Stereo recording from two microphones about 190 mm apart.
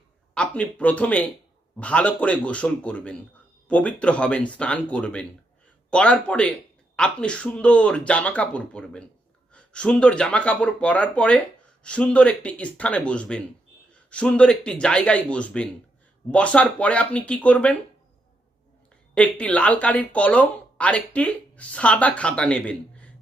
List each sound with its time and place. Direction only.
0.3 s a man's voice: 5° left (ahead or behind)
19.1 s speech: 5° left (ahead or behind)